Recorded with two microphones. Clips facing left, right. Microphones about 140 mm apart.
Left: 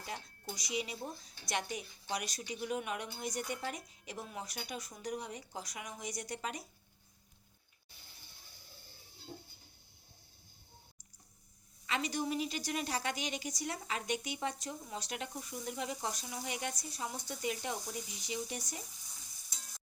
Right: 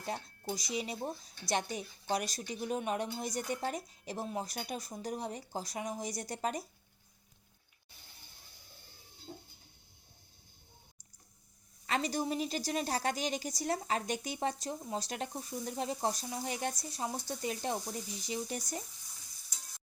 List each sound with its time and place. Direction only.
0.0 s a woman's voice: 35° right (ahead or behind)
11.9 s a woman's voice: 40° right (ahead or behind)